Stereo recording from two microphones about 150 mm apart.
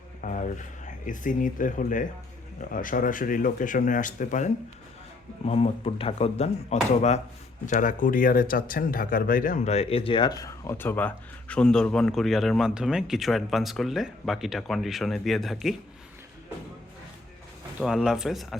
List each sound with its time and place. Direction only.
0.2 s speech: 60° left (ahead or behind)
5.5 s speech: 45° left (ahead or behind)
7.7 s speech: 60° left (ahead or behind)
9.6 s speech: 40° left (ahead or behind); by 15.7 s centre (ahead or behind)
17.7 s speech: 5° right (ahead or behind)